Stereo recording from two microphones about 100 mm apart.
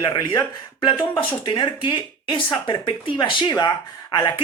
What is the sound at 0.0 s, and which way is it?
Speech, 50° left (ahead or behind).